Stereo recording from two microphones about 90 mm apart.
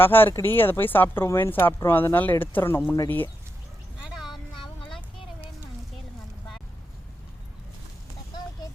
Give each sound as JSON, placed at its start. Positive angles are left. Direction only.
{"t": 0.0, "sound": "speech", "side_deg": 25}